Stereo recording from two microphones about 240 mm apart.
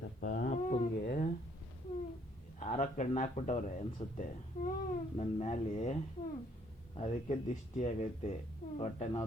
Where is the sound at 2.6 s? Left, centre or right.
Left.